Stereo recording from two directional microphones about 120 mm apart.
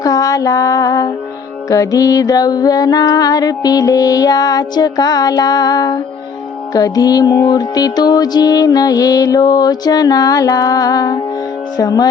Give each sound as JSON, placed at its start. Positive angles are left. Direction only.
{"t": 0.0, "sound": "music", "side_deg": 30}